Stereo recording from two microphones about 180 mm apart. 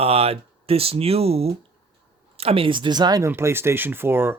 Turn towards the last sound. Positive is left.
turn(degrees=-10)  # may be behind; listen again after turning